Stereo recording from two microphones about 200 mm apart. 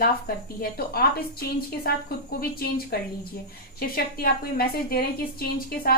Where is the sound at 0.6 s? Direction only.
50° left (ahead or behind).